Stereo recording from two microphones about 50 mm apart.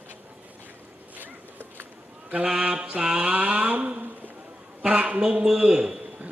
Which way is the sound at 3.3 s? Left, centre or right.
Right.